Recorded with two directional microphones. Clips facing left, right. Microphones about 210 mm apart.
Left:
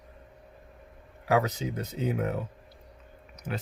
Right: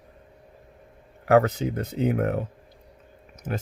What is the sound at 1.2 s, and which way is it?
Speech, 55° right (ahead or behind).